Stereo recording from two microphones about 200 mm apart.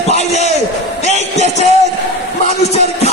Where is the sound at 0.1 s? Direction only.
35° left (ahead or behind).